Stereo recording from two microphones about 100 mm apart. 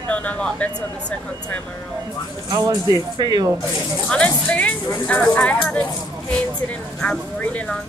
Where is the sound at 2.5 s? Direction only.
40° right (ahead or behind).